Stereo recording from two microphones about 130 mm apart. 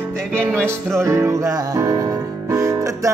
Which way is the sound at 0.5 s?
20° right (ahead or behind).